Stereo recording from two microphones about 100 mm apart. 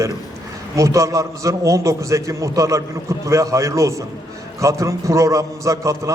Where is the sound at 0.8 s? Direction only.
30° right (ahead or behind).